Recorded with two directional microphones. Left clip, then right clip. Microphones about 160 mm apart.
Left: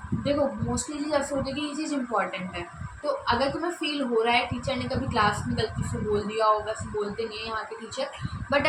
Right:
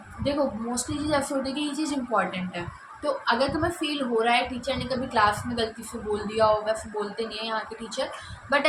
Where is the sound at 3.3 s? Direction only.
25° right (ahead or behind).